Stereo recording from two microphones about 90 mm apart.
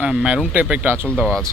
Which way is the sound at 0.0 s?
10° right (ahead or behind).